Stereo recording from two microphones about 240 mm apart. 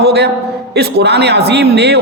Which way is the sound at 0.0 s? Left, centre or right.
Right.